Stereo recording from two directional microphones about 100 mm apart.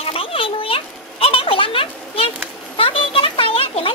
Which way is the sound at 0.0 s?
70° left (ahead or behind).